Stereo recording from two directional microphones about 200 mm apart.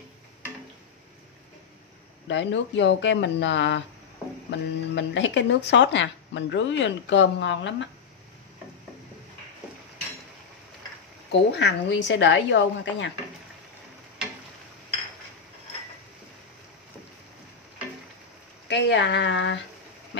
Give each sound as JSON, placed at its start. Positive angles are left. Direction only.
{"t": 2.2, "sound": "speech", "side_deg": 65}
{"t": 11.5, "sound": "speech", "side_deg": 60}
{"t": 18.7, "sound": "speech", "side_deg": 60}